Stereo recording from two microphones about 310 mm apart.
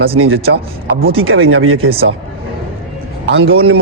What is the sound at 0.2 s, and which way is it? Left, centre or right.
Speech, right.